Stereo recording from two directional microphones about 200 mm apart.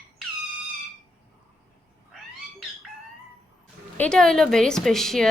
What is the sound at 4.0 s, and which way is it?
A woman's voice, 5° left (ahead or behind).